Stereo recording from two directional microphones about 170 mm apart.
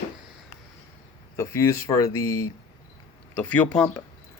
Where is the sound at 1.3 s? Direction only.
15° left (ahead or behind).